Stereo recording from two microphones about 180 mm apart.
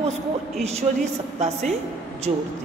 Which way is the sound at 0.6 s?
35° right (ahead or behind).